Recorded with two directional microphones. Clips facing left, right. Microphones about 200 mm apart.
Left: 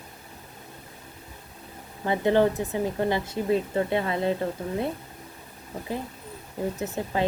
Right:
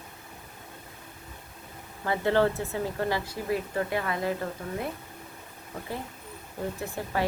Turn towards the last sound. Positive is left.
turn(degrees=20)  # may be behind; listen again after turning